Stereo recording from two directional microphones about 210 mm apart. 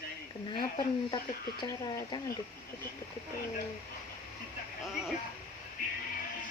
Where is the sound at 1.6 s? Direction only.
15° left (ahead or behind).